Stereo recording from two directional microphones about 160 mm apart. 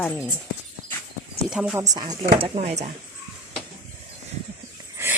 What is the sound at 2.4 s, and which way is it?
Speech, 40° right (ahead or behind).